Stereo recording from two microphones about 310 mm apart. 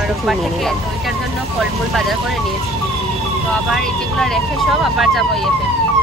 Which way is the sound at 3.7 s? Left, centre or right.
Centre.